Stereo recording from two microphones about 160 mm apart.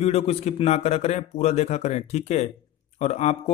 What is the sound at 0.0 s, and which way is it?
A man's voice, 40° left (ahead or behind).